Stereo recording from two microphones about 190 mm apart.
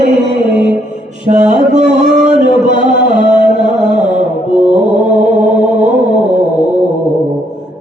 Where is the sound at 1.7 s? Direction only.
40° right (ahead or behind).